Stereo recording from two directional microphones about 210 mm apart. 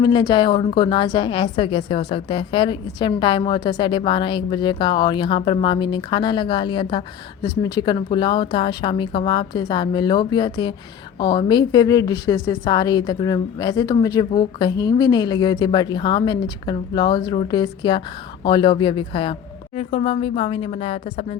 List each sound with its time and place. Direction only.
0.0 s a woman's voice: 20° left (ahead or behind)